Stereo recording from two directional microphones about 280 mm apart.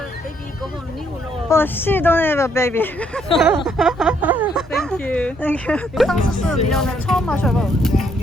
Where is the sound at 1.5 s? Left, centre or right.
Centre.